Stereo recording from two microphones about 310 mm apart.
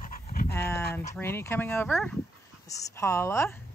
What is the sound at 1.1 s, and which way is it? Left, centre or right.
A woman's voice, centre.